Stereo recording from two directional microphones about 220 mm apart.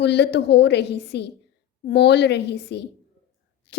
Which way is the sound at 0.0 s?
50° left (ahead or behind).